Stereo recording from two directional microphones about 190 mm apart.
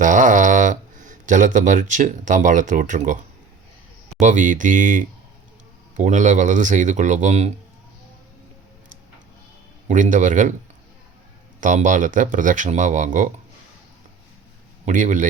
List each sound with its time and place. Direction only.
0.0 s speech: 40° right (ahead or behind)
4.2 s speech: 40° right (ahead or behind)
9.9 s speech: 40° right (ahead or behind)
11.6 s speech: 40° right (ahead or behind)
14.8 s speech: 40° right (ahead or behind)